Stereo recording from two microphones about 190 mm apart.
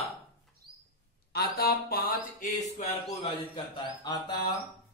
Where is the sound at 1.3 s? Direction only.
55° left (ahead or behind).